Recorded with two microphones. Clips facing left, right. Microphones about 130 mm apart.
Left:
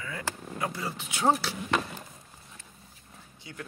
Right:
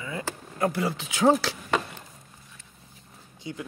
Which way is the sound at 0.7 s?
80° right.